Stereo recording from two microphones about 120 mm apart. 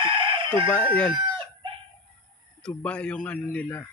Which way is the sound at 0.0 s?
40° right (ahead or behind).